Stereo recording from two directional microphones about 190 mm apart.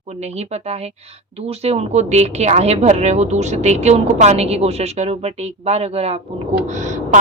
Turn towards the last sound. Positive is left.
turn(degrees=-40)  # may be behind; listen again after turning